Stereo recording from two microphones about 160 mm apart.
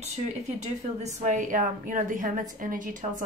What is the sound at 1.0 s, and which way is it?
A woman's voice, 50° right (ahead or behind).